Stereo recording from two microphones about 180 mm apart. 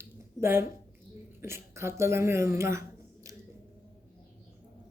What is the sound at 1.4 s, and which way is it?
Speech, 15° right (ahead or behind).